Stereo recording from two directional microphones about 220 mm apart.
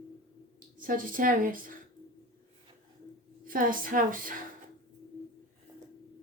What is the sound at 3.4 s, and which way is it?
Speech, 40° right (ahead or behind).